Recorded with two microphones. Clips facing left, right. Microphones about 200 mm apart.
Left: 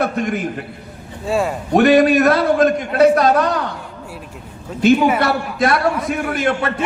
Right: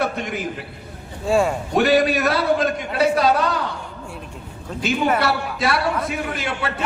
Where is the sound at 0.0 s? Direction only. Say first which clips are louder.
Left 5 dB; 50° left (ahead or behind).